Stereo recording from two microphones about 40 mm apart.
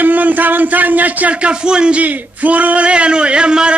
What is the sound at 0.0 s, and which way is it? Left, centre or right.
Speech, right.